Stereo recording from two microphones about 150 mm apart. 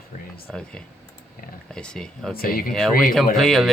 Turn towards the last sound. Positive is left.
turn(degrees=0)  # may be behind; listen again after turning